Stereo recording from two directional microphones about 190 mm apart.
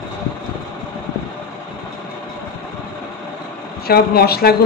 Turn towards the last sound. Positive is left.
turn(degrees=55)  # may be behind; listen again after turning